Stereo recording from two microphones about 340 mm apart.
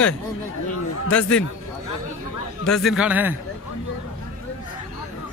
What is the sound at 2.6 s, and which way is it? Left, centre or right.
Speech, centre.